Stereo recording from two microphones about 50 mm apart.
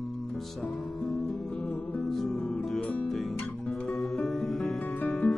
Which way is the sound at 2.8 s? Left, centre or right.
Left.